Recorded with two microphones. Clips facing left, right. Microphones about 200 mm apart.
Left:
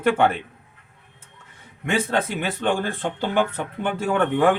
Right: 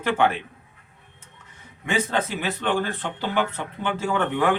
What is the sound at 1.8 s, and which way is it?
Speech, 55° left (ahead or behind).